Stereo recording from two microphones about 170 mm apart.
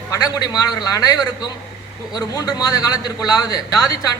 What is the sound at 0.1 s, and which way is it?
A man's voice, 20° left (ahead or behind).